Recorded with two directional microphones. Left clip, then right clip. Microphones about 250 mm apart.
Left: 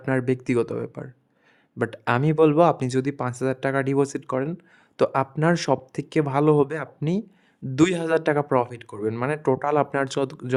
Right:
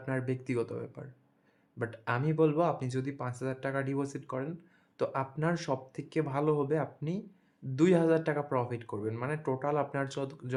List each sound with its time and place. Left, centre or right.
0.0 s speech: left